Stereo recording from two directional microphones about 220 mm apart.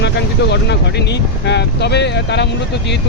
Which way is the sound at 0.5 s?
50° left (ahead or behind).